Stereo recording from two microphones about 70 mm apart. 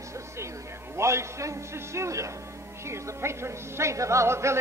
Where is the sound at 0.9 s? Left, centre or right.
Right.